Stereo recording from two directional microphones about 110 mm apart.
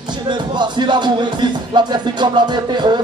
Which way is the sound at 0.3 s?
45° right (ahead or behind).